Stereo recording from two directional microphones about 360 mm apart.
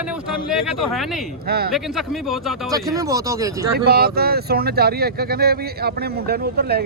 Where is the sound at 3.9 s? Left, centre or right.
Right.